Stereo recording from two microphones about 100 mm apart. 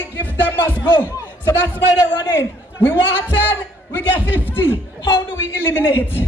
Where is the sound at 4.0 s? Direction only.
20° left (ahead or behind).